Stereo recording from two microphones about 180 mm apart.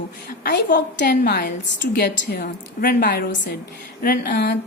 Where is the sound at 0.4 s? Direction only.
55° left (ahead or behind).